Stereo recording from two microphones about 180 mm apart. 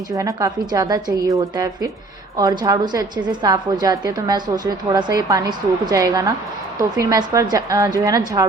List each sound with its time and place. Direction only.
0.2 s a woman's voice: 15° right (ahead or behind)